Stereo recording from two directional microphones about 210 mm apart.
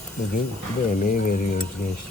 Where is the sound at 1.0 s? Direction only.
40° left (ahead or behind).